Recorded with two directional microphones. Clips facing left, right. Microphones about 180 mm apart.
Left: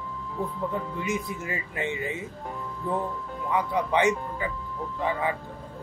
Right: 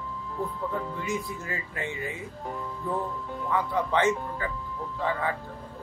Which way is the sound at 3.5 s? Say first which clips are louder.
Left 1 dB; 15° left (ahead or behind).